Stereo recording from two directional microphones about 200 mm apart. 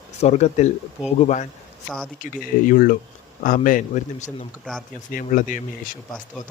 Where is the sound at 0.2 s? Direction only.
30° left (ahead or behind).